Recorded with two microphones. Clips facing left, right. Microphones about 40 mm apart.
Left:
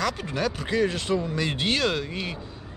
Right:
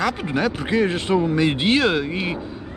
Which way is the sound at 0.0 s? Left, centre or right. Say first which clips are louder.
Right 5 dB; right.